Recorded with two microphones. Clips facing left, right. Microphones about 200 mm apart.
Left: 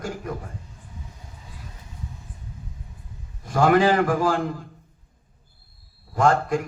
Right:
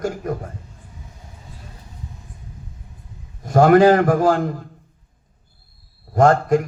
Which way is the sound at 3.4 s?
45° right (ahead or behind).